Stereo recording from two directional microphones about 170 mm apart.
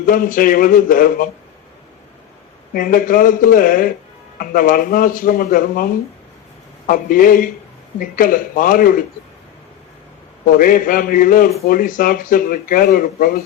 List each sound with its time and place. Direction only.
0.0 s speech: 55° left (ahead or behind)
2.7 s speech: 55° left (ahead or behind)
10.4 s speech: 55° left (ahead or behind)